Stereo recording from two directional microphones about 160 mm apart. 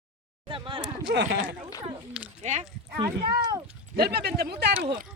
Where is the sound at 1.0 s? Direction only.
90° right.